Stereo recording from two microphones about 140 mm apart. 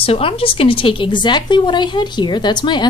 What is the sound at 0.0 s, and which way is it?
A woman's voice, 40° left (ahead or behind).